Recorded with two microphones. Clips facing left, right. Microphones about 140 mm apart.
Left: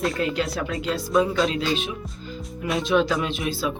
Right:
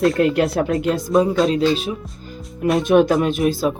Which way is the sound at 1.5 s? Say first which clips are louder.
Right 7 dB; 40° right (ahead or behind).